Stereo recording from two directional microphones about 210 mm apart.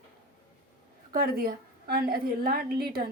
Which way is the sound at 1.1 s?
45° right (ahead or behind).